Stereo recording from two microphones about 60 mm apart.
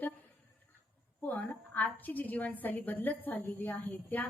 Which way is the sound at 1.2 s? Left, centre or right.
Left.